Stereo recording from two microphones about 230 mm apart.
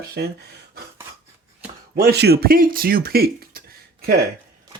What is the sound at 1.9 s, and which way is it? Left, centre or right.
Speech, right.